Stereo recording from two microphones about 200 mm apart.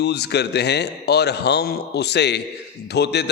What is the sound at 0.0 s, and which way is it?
A man's voice, 55° left (ahead or behind).